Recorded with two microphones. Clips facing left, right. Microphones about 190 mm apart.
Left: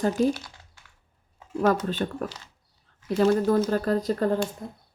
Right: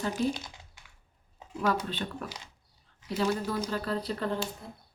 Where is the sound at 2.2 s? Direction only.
15° right (ahead or behind).